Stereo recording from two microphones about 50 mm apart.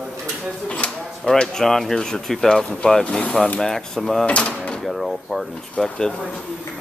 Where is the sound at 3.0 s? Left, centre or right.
Left.